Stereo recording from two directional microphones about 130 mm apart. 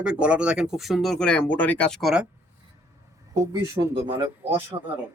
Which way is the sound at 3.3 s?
25° right (ahead or behind).